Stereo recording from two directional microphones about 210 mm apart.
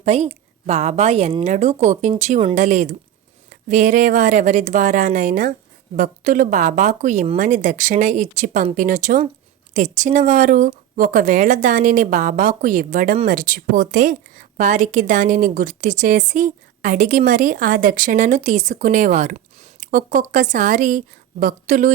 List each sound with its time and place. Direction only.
0.0 s a woman's voice: 30° right (ahead or behind)